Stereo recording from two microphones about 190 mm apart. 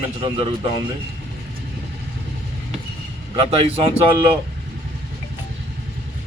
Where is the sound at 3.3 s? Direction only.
30° right (ahead or behind).